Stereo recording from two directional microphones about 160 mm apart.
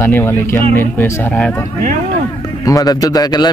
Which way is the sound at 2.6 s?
20° left (ahead or behind).